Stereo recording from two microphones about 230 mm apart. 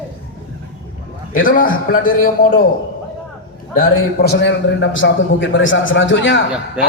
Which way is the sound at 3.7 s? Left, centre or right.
Left.